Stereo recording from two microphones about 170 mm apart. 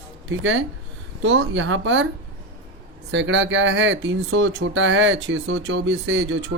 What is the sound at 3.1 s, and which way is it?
Speech, 90° right.